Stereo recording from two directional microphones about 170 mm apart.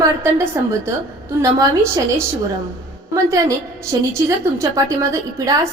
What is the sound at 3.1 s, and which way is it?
A woman's voice, 20° right (ahead or behind).